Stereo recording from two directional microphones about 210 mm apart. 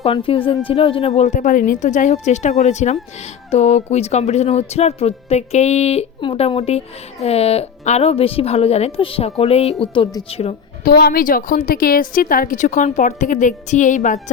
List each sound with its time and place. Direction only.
0.0 s a woman's voice: 25° left (ahead or behind)
10.8 s a woman's voice: 45° left (ahead or behind)